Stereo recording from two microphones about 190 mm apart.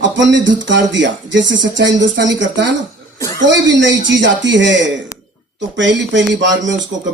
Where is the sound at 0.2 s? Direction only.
70° right (ahead or behind).